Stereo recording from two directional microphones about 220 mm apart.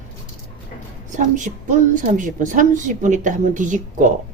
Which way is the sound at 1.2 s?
35° right (ahead or behind).